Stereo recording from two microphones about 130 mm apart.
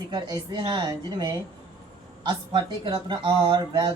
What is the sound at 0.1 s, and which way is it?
Speech, 35° right (ahead or behind).